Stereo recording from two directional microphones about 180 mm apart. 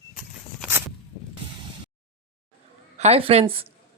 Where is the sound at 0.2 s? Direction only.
10° right (ahead or behind).